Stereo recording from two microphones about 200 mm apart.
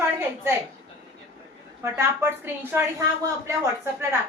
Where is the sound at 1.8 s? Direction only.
10° right (ahead or behind).